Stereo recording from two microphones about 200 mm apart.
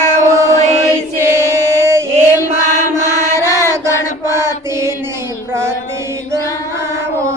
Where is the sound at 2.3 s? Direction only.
15° left (ahead or behind).